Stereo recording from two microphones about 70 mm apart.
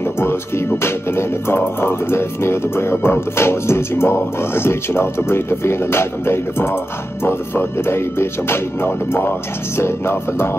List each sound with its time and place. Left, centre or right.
0.2 s speech: left